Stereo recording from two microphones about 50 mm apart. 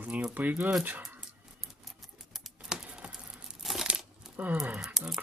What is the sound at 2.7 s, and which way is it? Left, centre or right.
Typing, centre.